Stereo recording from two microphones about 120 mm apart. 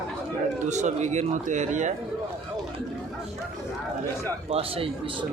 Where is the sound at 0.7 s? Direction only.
75° right (ahead or behind).